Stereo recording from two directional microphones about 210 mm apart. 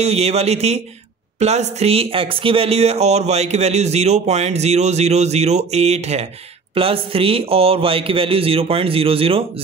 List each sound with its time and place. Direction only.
0.0 s a man's voice: 30° right (ahead or behind)